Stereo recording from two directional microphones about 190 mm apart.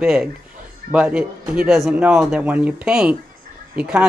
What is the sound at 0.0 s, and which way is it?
Speech, 5° right (ahead or behind).